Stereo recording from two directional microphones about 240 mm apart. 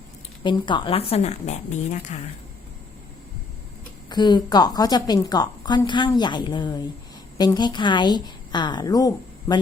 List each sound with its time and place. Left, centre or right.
0.4 s a woman's voice: centre
4.1 s a woman's voice: centre